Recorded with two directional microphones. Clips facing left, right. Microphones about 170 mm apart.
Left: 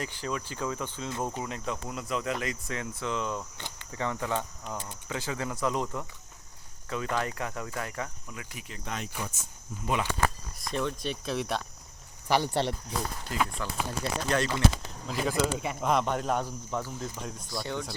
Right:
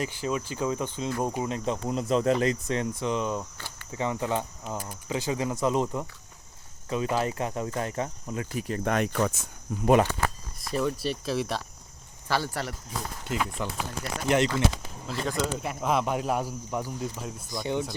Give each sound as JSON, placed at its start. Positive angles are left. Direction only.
{"t": 0.0, "sound": "speech", "side_deg": -20}
{"t": 4.7, "sound": "speech", "side_deg": -5}
{"t": 5.0, "sound": "speech", "side_deg": -20}
{"t": 7.2, "sound": "speech", "side_deg": -25}
{"t": 8.8, "sound": "speech", "side_deg": -60}
{"t": 10.2, "sound": "speech", "side_deg": -5}
{"t": 12.3, "sound": "speech", "side_deg": 20}
{"t": 13.2, "sound": "speech", "side_deg": -20}
{"t": 15.0, "sound": "speech", "side_deg": 5}
{"t": 17.5, "sound": "speech", "side_deg": -20}